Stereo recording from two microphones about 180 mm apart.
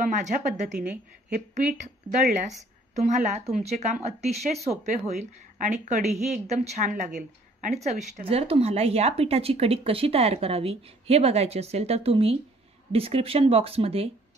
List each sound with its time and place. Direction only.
0.0 s a woman's voice: 45° right (ahead or behind)